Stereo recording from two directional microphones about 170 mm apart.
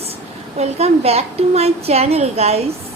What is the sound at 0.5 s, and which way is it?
A woman's voice, 40° right (ahead or behind).